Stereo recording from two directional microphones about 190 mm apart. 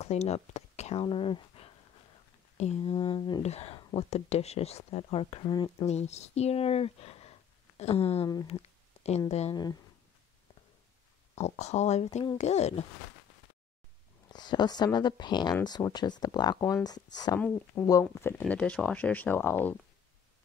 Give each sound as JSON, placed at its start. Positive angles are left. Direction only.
{"t": 0.0, "sound": "speech", "side_deg": 35}
{"t": 5.9, "sound": "speech", "side_deg": 35}
{"t": 9.0, "sound": "a sound", "side_deg": 35}
{"t": 9.3, "sound": "speech", "side_deg": 35}
{"t": 11.3, "sound": "speech", "side_deg": 35}
{"t": 14.3, "sound": "speech", "side_deg": 20}
{"t": 17.4, "sound": "speech", "side_deg": 5}